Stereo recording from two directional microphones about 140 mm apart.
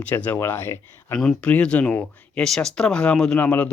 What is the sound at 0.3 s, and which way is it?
Speech, 15° left (ahead or behind).